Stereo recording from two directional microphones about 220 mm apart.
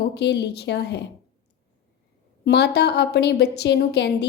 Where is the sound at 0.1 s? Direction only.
50° left (ahead or behind).